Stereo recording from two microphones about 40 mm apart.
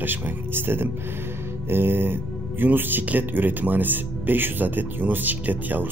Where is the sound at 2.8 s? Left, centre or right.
Right.